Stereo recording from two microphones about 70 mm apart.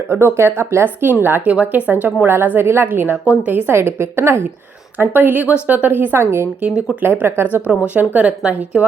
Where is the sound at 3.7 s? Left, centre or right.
Right.